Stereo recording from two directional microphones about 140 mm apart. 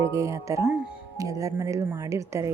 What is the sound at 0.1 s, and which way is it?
Speech, 20° right (ahead or behind).